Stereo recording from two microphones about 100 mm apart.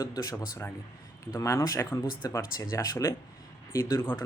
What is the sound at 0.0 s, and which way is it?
Speech, 40° left (ahead or behind).